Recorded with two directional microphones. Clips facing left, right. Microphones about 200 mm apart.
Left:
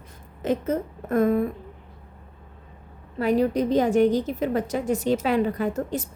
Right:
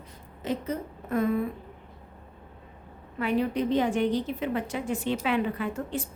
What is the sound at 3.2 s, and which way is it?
A woman's voice, 40° left (ahead or behind).